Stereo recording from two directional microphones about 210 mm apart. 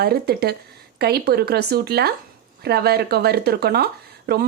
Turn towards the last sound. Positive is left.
turn(degrees=-50)  # may be behind; listen again after turning